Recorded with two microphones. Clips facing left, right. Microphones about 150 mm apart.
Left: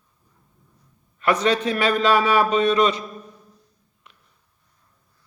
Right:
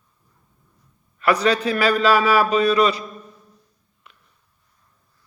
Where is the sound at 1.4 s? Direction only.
30° left (ahead or behind).